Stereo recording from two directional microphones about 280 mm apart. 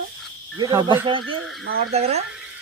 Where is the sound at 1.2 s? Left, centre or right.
Right.